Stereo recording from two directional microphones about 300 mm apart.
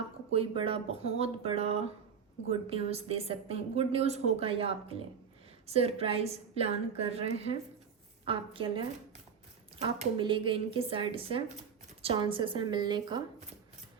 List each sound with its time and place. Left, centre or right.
0.3 s a woman's voice: centre